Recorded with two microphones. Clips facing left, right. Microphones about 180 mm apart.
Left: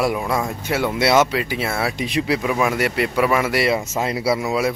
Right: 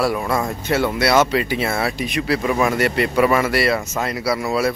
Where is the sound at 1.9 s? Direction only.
20° left (ahead or behind).